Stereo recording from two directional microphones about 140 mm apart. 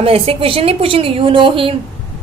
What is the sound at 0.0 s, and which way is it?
A woman's voice, 45° right (ahead or behind).